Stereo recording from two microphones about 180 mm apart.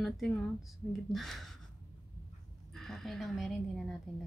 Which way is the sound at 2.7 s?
Centre (ahead or behind).